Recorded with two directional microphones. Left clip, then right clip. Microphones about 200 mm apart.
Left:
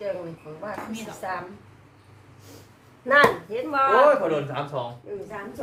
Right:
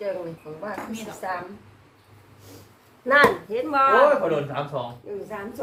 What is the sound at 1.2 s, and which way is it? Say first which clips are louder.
Speech: right 1 dB; 25° right (ahead or behind).